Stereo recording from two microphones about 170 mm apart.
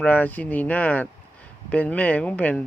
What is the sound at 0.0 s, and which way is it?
Speech, 10° left (ahead or behind).